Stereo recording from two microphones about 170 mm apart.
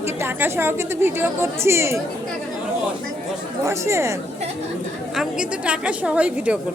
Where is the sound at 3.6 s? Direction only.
15° right (ahead or behind).